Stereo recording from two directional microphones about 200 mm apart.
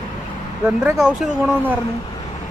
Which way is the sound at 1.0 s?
Centre (ahead or behind).